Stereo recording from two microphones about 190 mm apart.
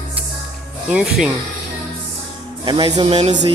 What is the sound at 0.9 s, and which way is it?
Speech, 5° right (ahead or behind).